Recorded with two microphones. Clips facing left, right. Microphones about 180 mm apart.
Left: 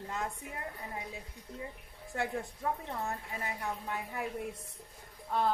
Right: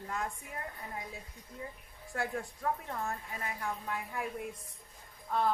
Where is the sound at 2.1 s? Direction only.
20° left (ahead or behind).